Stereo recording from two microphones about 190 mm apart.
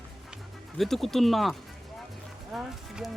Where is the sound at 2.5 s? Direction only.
5° right (ahead or behind).